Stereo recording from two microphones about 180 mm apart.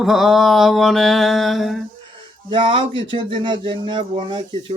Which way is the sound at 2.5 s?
25° right (ahead or behind).